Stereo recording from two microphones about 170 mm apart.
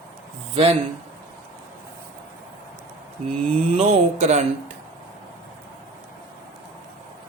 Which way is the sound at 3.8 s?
40° right (ahead or behind).